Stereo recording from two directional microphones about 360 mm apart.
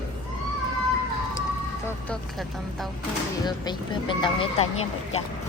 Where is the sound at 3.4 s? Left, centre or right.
Centre.